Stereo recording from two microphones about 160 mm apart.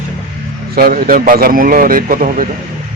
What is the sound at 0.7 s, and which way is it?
A man's voice, 70° right (ahead or behind).